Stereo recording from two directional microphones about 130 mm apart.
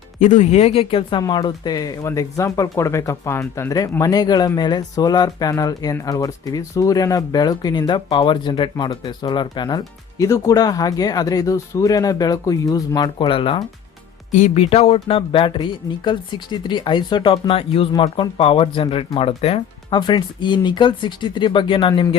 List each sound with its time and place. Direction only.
0.2 s speech: 65° left (ahead or behind); by 13.7 s 45° left (ahead or behind)
14.3 s speech: 60° left (ahead or behind); by 22.0 s 40° left (ahead or behind)